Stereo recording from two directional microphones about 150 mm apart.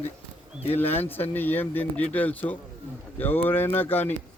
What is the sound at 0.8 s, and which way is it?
Speech, 15° left (ahead or behind).